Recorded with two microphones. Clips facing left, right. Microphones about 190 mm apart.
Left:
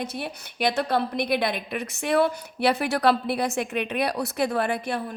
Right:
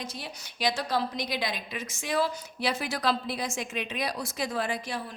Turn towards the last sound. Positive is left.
turn(degrees=60)  # may be behind; listen again after turning